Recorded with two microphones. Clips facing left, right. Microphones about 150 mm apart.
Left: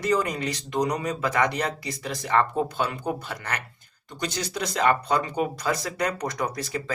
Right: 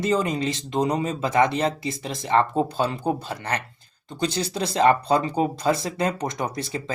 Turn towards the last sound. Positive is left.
turn(degrees=-25)  # may be behind; listen again after turning